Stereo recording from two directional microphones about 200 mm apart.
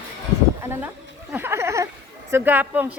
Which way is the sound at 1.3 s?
10° right (ahead or behind).